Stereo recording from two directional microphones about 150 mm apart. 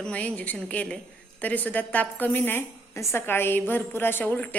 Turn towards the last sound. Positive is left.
turn(degrees=10)  # may be behind; listen again after turning